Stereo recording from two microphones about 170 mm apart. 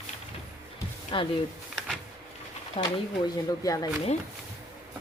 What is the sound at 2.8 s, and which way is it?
Speech, 20° left (ahead or behind).